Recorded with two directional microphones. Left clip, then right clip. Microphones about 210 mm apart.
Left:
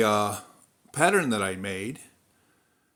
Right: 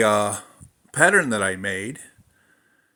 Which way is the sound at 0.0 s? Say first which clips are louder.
Right 4 dB; 10° right (ahead or behind).